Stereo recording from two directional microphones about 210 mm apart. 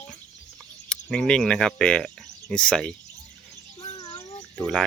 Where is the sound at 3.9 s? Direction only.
15° left (ahead or behind).